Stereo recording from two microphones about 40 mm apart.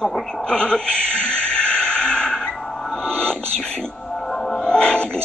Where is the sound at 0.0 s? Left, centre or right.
Centre.